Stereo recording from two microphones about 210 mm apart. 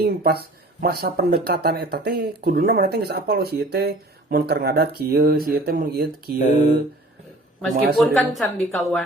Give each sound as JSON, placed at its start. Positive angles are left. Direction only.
{"t": 0.0, "sound": "speech", "side_deg": -45}
{"t": 6.4, "sound": "speech", "side_deg": 35}
{"t": 7.9, "sound": "a woman's voice", "side_deg": 0}